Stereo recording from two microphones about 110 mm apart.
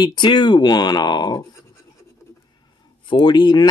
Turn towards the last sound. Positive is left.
turn(degrees=40)  # may be behind; listen again after turning